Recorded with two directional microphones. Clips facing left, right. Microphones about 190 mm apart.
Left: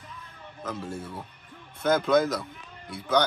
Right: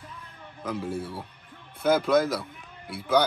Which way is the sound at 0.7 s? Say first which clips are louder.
Right 3 dB; 15° right (ahead or behind).